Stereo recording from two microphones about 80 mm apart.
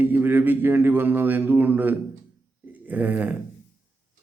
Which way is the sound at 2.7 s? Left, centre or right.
Centre.